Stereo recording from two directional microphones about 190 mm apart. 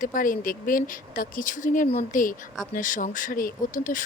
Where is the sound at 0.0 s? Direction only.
45° left (ahead or behind).